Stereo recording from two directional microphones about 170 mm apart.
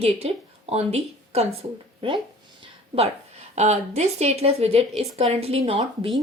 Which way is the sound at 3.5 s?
40° right (ahead or behind).